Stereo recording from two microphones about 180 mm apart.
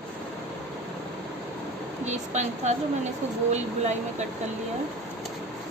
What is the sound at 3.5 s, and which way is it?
Speech, 40° right (ahead or behind).